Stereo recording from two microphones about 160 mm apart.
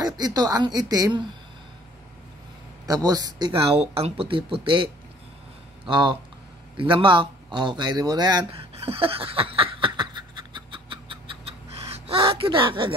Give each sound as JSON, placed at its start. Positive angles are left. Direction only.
{"t": 0.0, "sound": "speech", "side_deg": -25}
{"t": 2.9, "sound": "speech", "side_deg": -25}
{"t": 8.5, "sound": "a sound", "side_deg": -40}